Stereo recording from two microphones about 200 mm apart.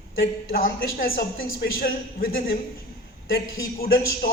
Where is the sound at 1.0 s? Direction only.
45° left (ahead or behind).